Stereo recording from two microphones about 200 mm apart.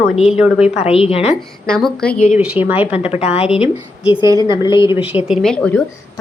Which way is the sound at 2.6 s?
10° right (ahead or behind).